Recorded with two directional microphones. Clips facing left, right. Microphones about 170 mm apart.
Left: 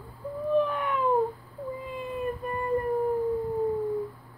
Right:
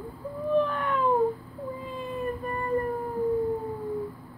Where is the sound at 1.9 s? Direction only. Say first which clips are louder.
Even; 10° left (ahead or behind).